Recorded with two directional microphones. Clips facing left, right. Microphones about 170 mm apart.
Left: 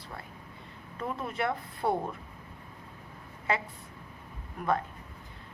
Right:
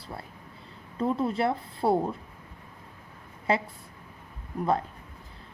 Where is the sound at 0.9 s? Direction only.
30° right (ahead or behind).